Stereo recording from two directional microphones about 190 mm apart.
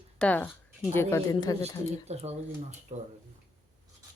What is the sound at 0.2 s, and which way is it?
Speech, 5° left (ahead or behind).